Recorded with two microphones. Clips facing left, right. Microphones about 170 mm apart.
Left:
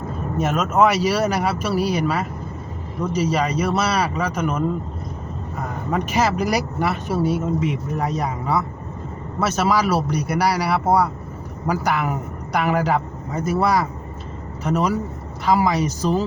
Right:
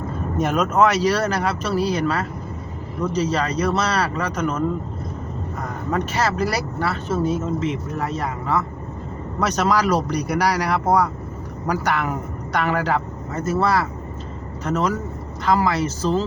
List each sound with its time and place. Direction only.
0.3 s speech: centre (ahead or behind)